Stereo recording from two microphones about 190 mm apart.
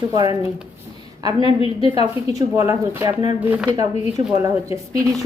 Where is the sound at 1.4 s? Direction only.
30° left (ahead or behind).